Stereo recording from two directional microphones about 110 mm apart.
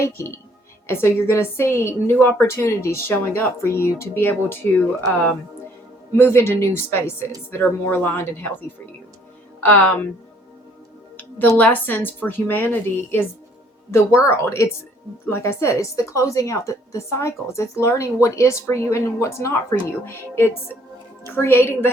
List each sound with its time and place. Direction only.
0.0 s a woman's voice: 25° left (ahead or behind)
9.6 s a woman's voice: 20° left (ahead or behind)
11.2 s a woman's voice: 15° left (ahead or behind)
14.3 s a woman's voice: 25° left (ahead or behind)